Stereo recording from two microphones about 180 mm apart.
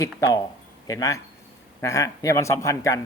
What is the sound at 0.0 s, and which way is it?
Speech, 20° left (ahead or behind).